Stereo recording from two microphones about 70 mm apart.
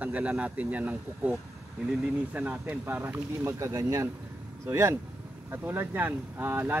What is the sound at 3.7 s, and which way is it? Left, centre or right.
Speech, right.